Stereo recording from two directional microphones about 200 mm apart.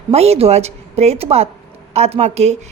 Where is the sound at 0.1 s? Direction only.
30° right (ahead or behind).